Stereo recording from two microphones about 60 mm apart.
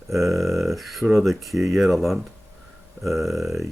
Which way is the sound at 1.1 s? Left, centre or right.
Centre.